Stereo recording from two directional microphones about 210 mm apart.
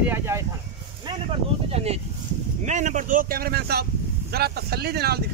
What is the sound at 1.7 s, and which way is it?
Speech, 30° right (ahead or behind).